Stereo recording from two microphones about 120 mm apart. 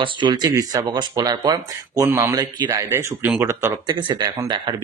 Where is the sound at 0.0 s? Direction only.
40° right (ahead or behind); by 3.7 s 20° right (ahead or behind).